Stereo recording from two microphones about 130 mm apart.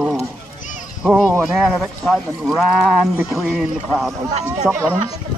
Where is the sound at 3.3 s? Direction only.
5° right (ahead or behind).